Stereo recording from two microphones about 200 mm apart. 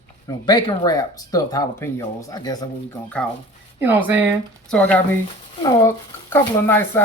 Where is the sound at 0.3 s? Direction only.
20° left (ahead or behind).